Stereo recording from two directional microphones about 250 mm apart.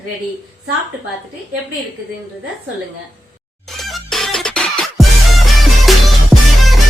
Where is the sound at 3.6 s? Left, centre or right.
Centre.